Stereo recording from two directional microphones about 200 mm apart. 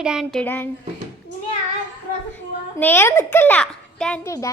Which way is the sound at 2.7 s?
10° left (ahead or behind).